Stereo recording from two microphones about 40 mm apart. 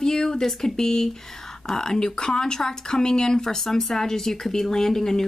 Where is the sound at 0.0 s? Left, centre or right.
Centre.